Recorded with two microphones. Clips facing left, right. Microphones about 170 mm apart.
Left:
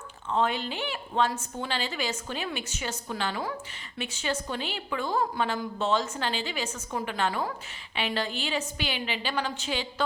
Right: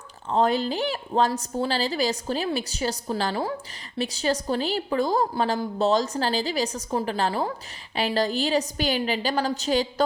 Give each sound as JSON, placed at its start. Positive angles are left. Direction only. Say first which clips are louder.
{"t": 0.3, "sound": "a woman's voice", "louder": "right 5 dB", "side_deg": -40}